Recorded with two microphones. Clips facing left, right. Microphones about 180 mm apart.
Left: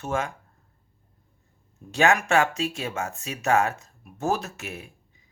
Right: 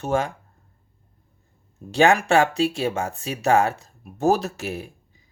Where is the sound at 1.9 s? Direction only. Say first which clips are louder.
Right 4 dB; 30° right (ahead or behind).